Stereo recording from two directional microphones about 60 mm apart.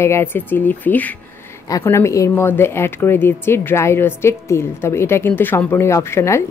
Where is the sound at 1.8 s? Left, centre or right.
Left.